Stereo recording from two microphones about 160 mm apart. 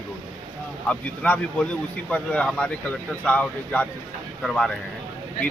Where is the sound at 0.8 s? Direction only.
5° left (ahead or behind).